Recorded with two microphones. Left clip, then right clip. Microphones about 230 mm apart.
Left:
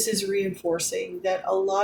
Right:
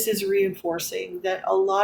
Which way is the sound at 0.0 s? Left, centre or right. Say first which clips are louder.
Right 3 dB; right.